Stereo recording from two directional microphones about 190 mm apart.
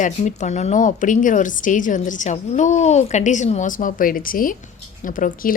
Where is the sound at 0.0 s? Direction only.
40° left (ahead or behind).